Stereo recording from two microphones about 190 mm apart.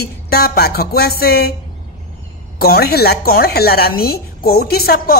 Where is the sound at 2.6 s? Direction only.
55° left (ahead or behind).